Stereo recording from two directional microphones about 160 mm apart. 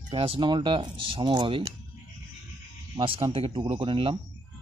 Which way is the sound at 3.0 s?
30° right (ahead or behind).